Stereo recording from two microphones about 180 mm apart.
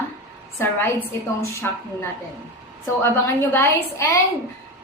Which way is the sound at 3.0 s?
15° left (ahead or behind).